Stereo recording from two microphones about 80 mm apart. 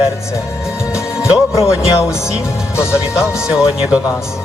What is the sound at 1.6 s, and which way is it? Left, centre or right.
Speech, left.